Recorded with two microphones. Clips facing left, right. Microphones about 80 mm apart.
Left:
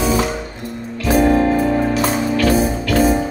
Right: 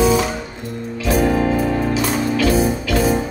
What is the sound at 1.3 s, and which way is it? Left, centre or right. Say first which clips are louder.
Music: left 3 dB; left.